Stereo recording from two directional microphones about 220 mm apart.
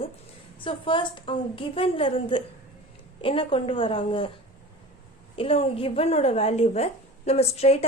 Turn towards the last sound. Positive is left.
turn(degrees=30)  # may be behind; listen again after turning